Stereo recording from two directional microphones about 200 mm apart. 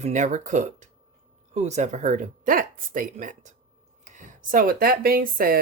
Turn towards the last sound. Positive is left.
turn(degrees=-45)  # may be behind; listen again after turning